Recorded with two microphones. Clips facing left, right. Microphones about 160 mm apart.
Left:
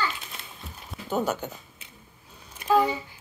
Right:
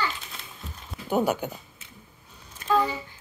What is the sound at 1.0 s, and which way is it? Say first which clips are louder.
Speech: right 3 dB; 10° right (ahead or behind).